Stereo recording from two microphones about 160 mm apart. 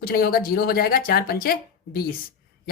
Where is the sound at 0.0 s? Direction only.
70° left (ahead or behind).